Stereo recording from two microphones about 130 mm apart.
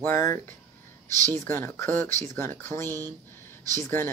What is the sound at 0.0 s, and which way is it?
Speech, 20° left (ahead or behind).